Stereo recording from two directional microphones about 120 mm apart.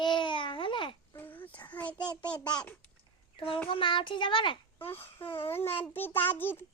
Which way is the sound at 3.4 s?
50° left (ahead or behind).